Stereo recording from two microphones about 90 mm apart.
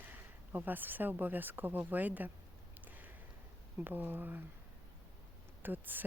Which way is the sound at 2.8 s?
20° right (ahead or behind).